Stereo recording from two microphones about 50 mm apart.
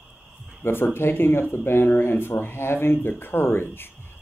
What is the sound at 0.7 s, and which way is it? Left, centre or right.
Speech, left.